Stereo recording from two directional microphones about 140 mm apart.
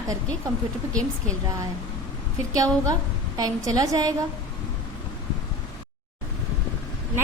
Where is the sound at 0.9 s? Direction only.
5° left (ahead or behind).